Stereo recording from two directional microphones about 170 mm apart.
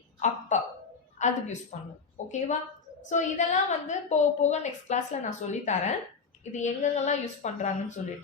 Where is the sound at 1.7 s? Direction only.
40° left (ahead or behind).